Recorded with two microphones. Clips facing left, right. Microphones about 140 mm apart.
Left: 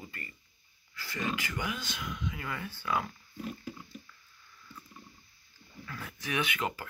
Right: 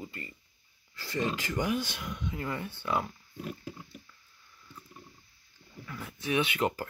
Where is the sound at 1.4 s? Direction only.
40° right (ahead or behind); by 3.1 s 25° right (ahead or behind).